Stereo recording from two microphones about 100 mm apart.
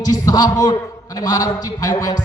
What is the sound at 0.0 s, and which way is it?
A man's voice, 40° left (ahead or behind).